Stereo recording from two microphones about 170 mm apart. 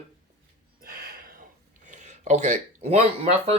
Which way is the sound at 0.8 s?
65° right (ahead or behind).